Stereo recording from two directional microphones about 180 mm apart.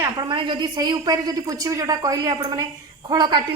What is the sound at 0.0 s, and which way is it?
A woman's voice, 25° right (ahead or behind).